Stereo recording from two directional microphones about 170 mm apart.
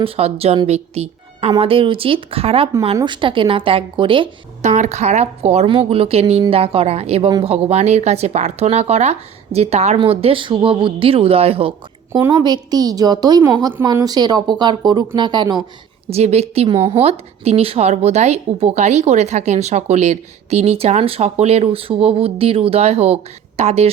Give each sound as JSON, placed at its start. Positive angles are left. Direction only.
{"t": 0.0, "sound": "a woman's voice", "side_deg": -35}
{"t": 4.6, "sound": "a woman's voice", "side_deg": -40}
{"t": 12.4, "sound": "a woman's voice", "side_deg": -25}
{"t": 16.0, "sound": "a woman's voice", "side_deg": -40}